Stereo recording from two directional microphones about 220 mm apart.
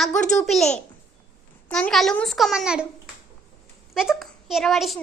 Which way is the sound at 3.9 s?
Centre (ahead or behind).